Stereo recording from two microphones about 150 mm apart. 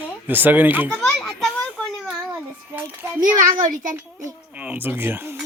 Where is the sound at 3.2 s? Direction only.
65° right (ahead or behind).